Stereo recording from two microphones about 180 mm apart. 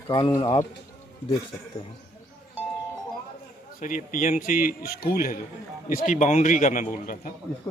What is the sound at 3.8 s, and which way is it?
A man's voice, 45° left (ahead or behind).